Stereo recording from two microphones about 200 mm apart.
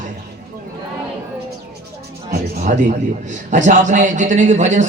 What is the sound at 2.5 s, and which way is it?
A man's voice, 35° right (ahead or behind).